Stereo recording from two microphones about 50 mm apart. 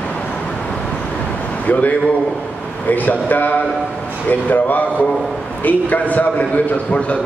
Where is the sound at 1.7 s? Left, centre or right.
Left.